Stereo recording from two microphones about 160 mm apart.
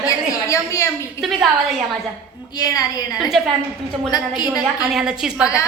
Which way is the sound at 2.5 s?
20° left (ahead or behind).